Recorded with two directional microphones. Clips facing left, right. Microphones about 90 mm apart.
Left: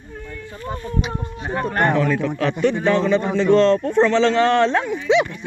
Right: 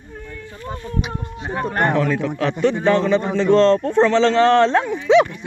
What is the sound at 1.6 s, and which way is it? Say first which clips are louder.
A man's voice: even; 25° right (ahead or behind).